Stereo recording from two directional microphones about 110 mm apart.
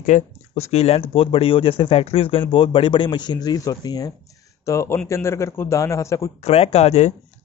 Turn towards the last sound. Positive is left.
turn(degrees=80)